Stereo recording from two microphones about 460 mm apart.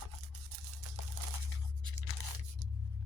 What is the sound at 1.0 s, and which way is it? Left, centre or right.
Crumpling, right.